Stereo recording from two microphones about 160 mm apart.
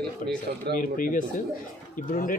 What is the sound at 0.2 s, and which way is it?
Speech, 55° left (ahead or behind).